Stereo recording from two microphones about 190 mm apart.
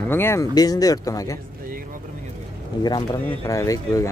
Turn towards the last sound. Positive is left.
turn(degrees=15)  # may be behind; listen again after turning